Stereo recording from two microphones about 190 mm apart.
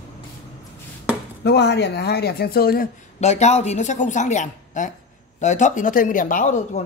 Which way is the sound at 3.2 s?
35° left (ahead or behind).